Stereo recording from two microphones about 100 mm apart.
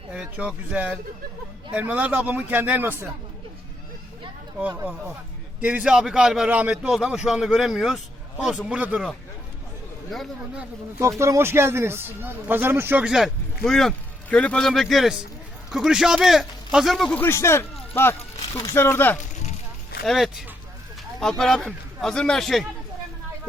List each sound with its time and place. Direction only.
0.1 s a man's voice: 10° right (ahead or behind)
5.5 s a man's voice: 10° right (ahead or behind)
10.1 s a man's voice: centre (ahead or behind)
11.2 s speech: 25° right (ahead or behind)
13.1 s a man's voice: 5° right (ahead or behind)
17.1 s speech: 20° left (ahead or behind)
20.1 s a man's voice: centre (ahead or behind)